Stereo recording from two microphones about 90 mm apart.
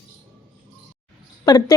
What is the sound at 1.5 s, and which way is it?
Speech, 45° left (ahead or behind).